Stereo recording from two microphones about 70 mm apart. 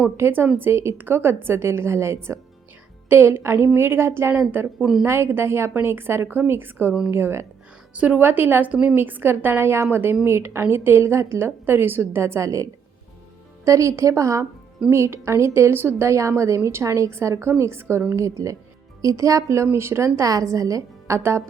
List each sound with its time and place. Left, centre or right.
0.2 s a woman's voice: right
0.7 s a woman's voice: right
7.9 s a woman's voice: centre; by 12.6 s right
13.7 s a woman's voice: right